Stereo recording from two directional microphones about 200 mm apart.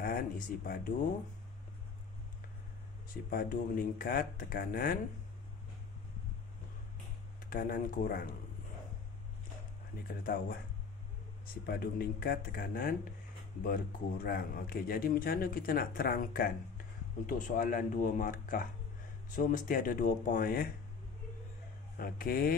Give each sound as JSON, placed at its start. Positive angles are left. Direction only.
{"t": 0.0, "sound": "speech", "side_deg": 45}
{"t": 3.3, "sound": "speech", "side_deg": 45}
{"t": 7.4, "sound": "speech", "side_deg": 45}
{"t": 10.2, "sound": "speech", "side_deg": 45}
{"t": 11.6, "sound": "speech", "side_deg": 50}
{"t": 21.9, "sound": "speech", "side_deg": 45}